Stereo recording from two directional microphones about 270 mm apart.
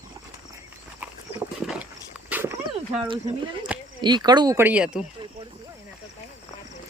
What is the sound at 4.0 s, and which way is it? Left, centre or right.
Speech, centre.